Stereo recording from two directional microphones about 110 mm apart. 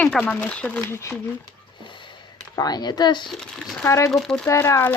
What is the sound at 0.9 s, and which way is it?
Speech, 25° left (ahead or behind).